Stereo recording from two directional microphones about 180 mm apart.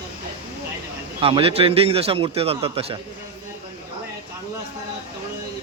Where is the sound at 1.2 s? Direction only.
30° right (ahead or behind).